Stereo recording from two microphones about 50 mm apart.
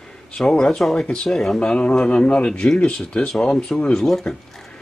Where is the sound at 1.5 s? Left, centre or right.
Centre.